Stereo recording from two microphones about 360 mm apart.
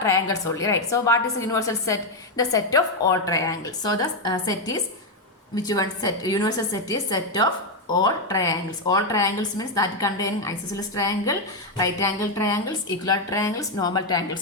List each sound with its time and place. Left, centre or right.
0.0 s a woman's voice: centre